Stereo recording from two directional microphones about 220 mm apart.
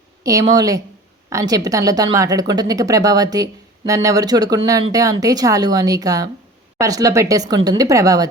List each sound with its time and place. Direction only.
0.2 s speech: 15° right (ahead or behind)